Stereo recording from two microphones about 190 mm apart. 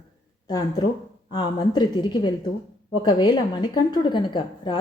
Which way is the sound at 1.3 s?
25° left (ahead or behind).